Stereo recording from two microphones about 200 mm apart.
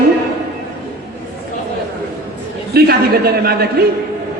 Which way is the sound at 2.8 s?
50° right (ahead or behind).